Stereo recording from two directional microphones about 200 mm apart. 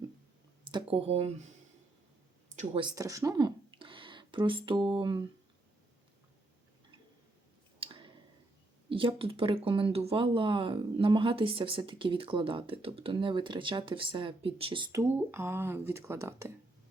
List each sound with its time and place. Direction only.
0.7 s speech: 25° right (ahead or behind)
2.6 s speech: 25° right (ahead or behind)
7.8 s clicking: 25° right (ahead or behind)
8.9 s speech: 25° right (ahead or behind)
15.3 s speech: 10° right (ahead or behind)